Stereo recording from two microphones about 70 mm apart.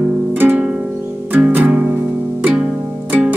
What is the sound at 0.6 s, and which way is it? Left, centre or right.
Music, centre.